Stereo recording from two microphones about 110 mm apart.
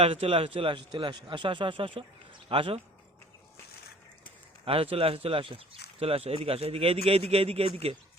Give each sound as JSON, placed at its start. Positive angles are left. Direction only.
{"t": 0.0, "sound": "a man's voice", "side_deg": -60}
{"t": 4.6, "sound": "speech", "side_deg": -60}